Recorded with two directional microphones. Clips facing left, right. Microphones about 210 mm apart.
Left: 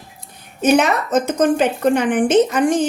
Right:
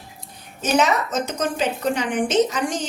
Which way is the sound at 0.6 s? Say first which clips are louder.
Left 5 dB; 60° left (ahead or behind).